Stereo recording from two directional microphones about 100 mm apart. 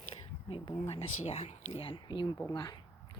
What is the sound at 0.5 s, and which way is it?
Speech, 90° left.